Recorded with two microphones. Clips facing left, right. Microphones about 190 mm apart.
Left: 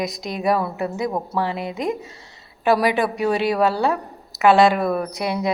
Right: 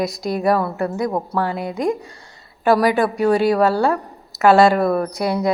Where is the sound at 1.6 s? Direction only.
20° left (ahead or behind).